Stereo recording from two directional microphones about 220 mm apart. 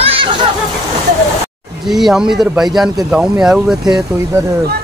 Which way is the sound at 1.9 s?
Centre (ahead or behind).